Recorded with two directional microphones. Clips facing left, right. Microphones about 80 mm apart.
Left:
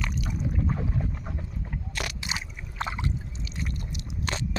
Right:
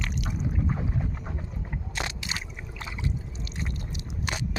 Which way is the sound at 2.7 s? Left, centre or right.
Left.